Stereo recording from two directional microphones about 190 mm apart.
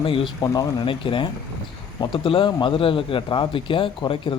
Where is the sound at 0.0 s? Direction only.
25° left (ahead or behind).